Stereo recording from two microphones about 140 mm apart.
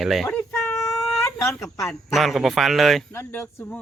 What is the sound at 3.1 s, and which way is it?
Speech, 15° left (ahead or behind).